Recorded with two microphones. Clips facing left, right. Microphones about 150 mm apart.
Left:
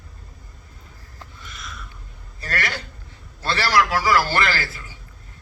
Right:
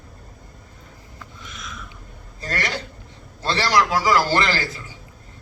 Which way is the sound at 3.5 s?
20° right (ahead or behind).